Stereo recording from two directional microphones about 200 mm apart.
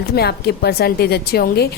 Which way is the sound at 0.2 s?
55° left (ahead or behind).